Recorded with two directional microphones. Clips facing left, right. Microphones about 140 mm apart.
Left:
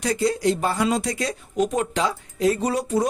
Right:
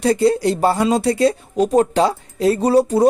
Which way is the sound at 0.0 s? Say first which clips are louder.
Right 6 dB; 30° right (ahead or behind).